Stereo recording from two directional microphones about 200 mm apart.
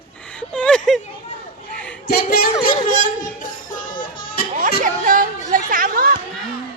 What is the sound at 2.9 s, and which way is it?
Music, 45° left (ahead or behind).